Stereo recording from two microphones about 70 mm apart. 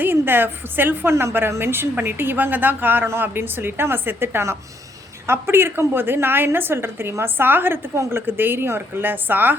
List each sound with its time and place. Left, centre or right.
0.0 s a woman's voice: right